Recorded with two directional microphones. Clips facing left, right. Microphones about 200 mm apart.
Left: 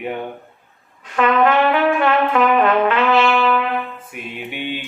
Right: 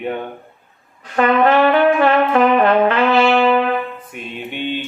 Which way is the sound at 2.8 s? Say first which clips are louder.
Right 2 dB; 35° right (ahead or behind).